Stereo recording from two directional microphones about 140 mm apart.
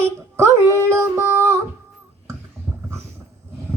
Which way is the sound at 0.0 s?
20° right (ahead or behind).